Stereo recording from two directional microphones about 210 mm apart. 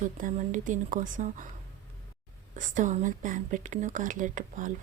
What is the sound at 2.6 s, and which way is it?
A woman's voice, 35° right (ahead or behind).